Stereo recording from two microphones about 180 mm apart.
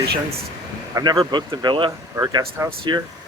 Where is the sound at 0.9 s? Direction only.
20° right (ahead or behind).